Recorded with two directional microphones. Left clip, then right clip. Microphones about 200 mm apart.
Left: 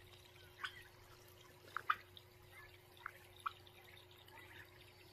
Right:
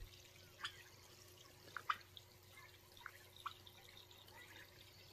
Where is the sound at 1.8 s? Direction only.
55° left (ahead or behind).